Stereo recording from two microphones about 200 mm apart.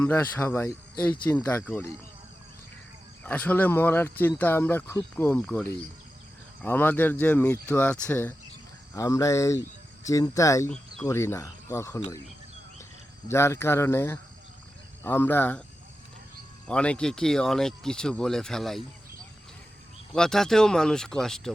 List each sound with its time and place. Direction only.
0.0 s speech: 10° left (ahead or behind)
3.2 s speech: 10° left (ahead or behind)
13.2 s speech: 15° left (ahead or behind)
16.6 s speech: 5° left (ahead or behind)
20.1 s speech: 5° left (ahead or behind)